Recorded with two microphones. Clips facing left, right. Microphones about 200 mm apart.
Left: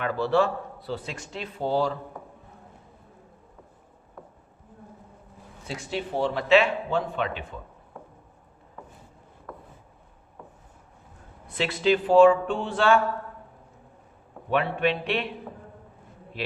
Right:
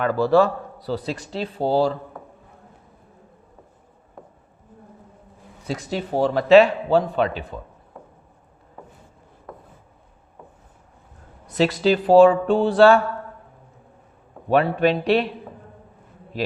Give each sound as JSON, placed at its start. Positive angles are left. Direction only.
{"t": 0.0, "sound": "a man's voice", "side_deg": -40}
{"t": 5.6, "sound": "a man's voice", "side_deg": -40}
{"t": 11.4, "sound": "a man's voice", "side_deg": -40}
{"t": 14.5, "sound": "a man's voice", "side_deg": -40}